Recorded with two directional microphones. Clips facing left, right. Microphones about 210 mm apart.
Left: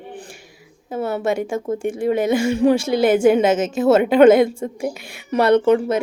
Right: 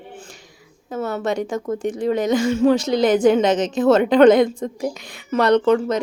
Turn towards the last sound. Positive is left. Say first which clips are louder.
# left 1 dB
turn(degrees=10)  # may be behind; listen again after turning